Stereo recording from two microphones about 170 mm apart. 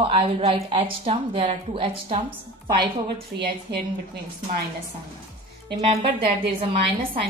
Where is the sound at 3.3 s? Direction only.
70° right (ahead or behind).